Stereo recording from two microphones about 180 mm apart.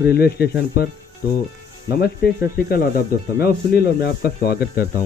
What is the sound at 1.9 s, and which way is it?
Speech, 60° left (ahead or behind).